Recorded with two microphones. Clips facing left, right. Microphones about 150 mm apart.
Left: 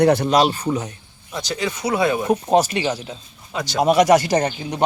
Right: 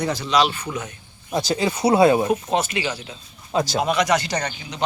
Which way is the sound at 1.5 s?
30° right (ahead or behind).